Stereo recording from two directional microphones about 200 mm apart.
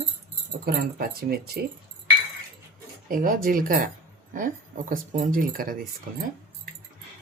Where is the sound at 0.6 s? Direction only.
50° right (ahead or behind).